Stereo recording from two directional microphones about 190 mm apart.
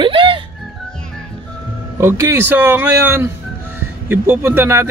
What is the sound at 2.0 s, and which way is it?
Speech, 15° right (ahead or behind).